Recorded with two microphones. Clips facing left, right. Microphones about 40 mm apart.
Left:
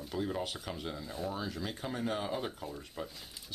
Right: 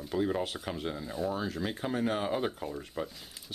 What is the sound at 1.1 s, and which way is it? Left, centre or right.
Speech, centre.